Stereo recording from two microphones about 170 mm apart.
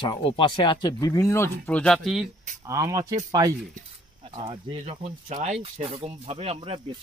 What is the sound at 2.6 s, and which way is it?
Speech, 20° right (ahead or behind).